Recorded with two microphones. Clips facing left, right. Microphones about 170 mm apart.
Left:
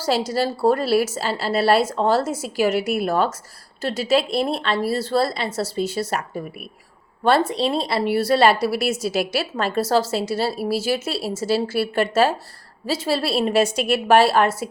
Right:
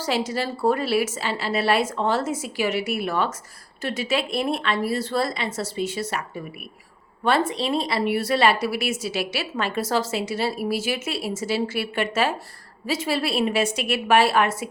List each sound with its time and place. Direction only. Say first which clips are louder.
0.0 s speech: left 4 dB; 35° left (ahead or behind)